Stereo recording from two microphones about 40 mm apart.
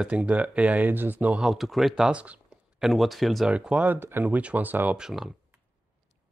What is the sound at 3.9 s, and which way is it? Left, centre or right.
Speech, right.